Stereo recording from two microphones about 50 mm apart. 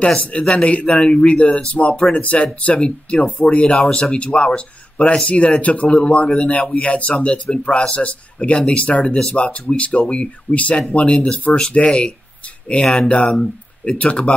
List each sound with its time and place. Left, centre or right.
0.3 s speech: left
0.8 s speech: centre